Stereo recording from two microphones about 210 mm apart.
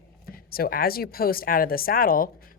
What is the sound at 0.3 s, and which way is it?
Speech, 45° left (ahead or behind).